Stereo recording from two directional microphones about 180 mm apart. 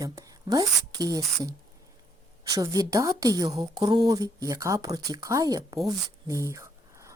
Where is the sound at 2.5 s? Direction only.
20° right (ahead or behind).